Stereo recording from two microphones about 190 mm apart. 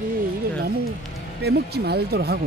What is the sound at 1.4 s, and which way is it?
Speech, 60° right (ahead or behind).